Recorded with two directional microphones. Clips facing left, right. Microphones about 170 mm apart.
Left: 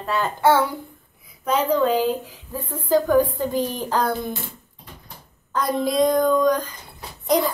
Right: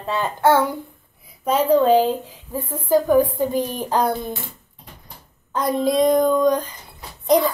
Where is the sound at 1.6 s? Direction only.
30° right (ahead or behind).